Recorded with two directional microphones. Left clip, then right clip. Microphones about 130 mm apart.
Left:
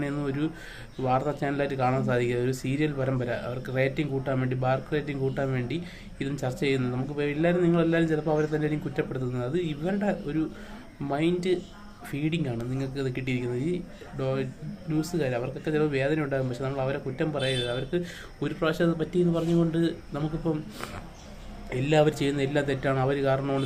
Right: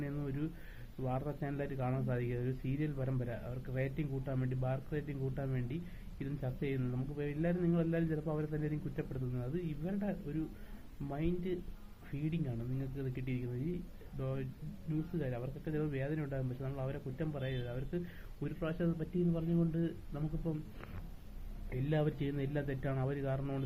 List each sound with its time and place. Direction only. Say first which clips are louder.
0.0 s speech: left 12 dB; 30° left (ahead or behind)